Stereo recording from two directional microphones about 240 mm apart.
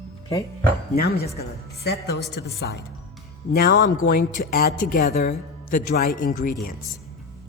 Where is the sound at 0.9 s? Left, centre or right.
Left.